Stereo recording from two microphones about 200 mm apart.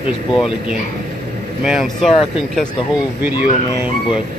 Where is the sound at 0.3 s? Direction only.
Centre (ahead or behind).